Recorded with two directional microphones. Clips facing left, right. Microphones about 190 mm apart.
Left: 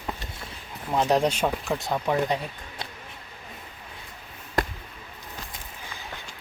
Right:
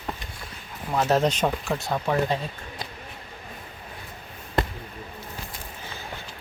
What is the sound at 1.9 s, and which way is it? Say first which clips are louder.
Speech: even; 5° left (ahead or behind).